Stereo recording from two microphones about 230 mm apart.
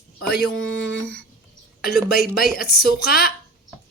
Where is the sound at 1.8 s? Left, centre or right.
Left.